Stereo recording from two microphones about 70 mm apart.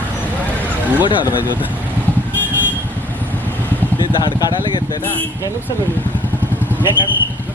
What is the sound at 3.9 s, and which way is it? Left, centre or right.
Speech, left.